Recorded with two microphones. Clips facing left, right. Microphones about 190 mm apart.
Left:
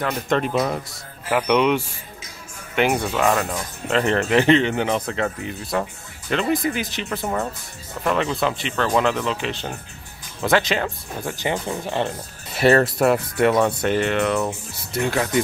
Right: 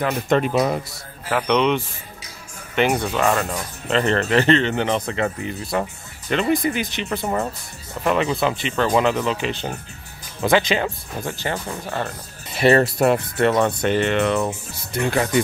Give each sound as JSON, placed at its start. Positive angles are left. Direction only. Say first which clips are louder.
{"t": 0.0, "sound": "speech", "louder": "right 2 dB", "side_deg": -5}
{"t": 1.3, "sound": "speech", "louder": "left 1 dB", "side_deg": 10}
{"t": 11.3, "sound": "speech", "louder": "left 2 dB", "side_deg": 15}
{"t": 12.5, "sound": "speech", "louder": "even", "side_deg": 0}